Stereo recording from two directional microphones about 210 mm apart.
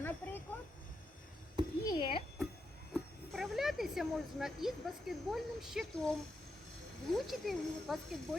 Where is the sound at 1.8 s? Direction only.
20° left (ahead or behind).